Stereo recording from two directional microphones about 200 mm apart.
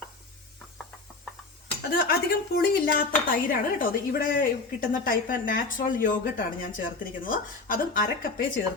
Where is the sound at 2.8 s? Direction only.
45° left (ahead or behind).